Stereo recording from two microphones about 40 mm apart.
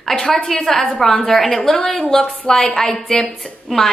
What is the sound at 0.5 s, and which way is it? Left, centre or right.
Speech, centre.